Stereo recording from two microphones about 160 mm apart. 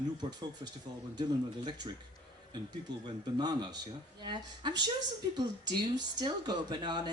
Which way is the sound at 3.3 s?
25° right (ahead or behind).